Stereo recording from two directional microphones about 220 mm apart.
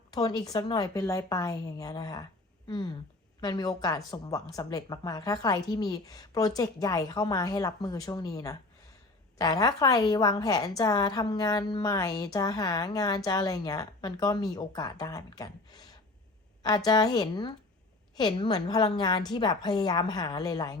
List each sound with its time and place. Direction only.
0.1 s a woman's voice: 20° left (ahead or behind)